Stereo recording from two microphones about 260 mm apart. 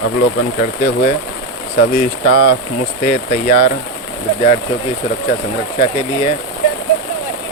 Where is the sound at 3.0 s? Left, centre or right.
Left.